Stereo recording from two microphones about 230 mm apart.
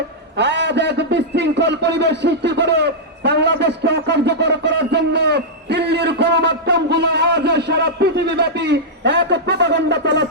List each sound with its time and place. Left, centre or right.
0.3 s a man's voice: right